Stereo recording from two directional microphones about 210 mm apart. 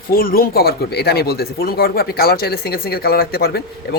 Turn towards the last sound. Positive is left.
turn(degrees=45)  # may be behind; listen again after turning